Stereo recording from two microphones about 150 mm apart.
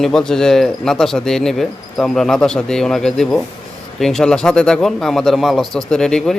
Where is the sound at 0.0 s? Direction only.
5° left (ahead or behind).